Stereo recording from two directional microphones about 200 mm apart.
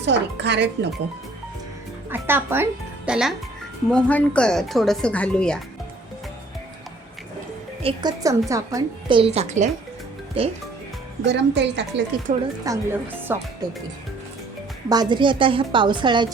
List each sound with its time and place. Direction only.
0.0 s a woman's voice: 60° right (ahead or behind)
2.0 s speech: 10° right (ahead or behind)
7.8 s a woman's voice: 30° right (ahead or behind)
8.2 s a woman's voice: 15° right (ahead or behind)
11.3 s a woman's voice: 60° right (ahead or behind)
12.3 s a woman's voice: 40° right (ahead or behind)
12.6 s speech: 15° right (ahead or behind)
14.8 s a woman's voice: 20° right (ahead or behind)